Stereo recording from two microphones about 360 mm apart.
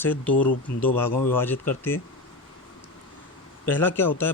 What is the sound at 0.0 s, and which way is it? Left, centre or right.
Speech, centre.